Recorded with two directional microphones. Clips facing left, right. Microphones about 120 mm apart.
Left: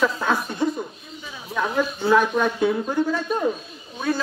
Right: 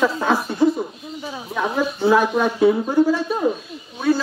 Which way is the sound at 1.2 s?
35° right (ahead or behind).